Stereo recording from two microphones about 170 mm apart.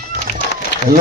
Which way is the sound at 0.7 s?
80° left.